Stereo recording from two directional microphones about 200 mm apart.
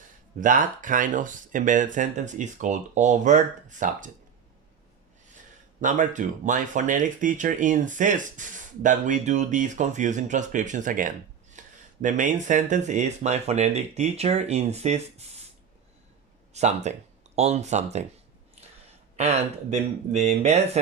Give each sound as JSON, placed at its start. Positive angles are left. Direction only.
{"t": 0.3, "sound": "speech", "side_deg": -40}
{"t": 5.8, "sound": "speech", "side_deg": -40}
{"t": 11.6, "sound": "a sound", "side_deg": -40}
{"t": 12.0, "sound": "speech", "side_deg": -40}
{"t": 16.6, "sound": "speech", "side_deg": -35}
{"t": 18.6, "sound": "a sound", "side_deg": -30}
{"t": 19.1, "sound": "speech", "side_deg": -30}